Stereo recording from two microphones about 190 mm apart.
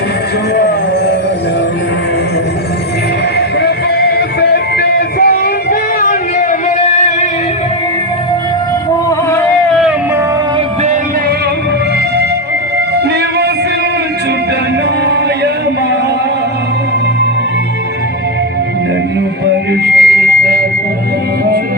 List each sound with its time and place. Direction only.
0.5 s music: 60° left (ahead or behind)
3.3 s music: 60° left (ahead or behind)
6.0 s a sound: 45° left (ahead or behind)
9.0 s boat: 15° left (ahead or behind)
19.8 s chirp tone: 55° right (ahead or behind)